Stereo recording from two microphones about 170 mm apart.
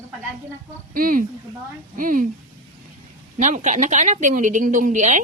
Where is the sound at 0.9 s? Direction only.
55° right (ahead or behind).